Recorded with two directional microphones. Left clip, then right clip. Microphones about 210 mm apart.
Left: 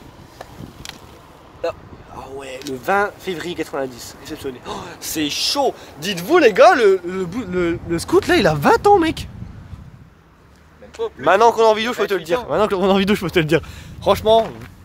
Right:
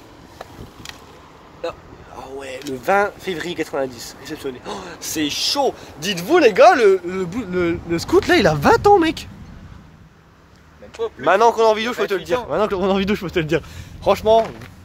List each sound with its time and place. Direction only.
2.1 s speech: 5° left (ahead or behind)
11.1 s a man's voice: 15° left (ahead or behind)
14.3 s speech: 5° right (ahead or behind)